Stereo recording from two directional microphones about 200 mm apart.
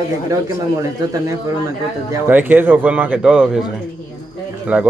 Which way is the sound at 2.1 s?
10° right (ahead or behind).